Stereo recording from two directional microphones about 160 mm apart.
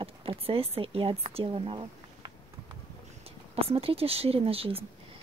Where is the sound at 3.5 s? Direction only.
35° right (ahead or behind).